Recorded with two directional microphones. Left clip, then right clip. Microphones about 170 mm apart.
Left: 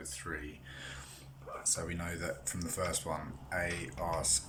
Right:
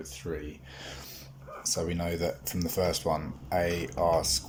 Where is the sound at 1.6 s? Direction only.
30° right (ahead or behind).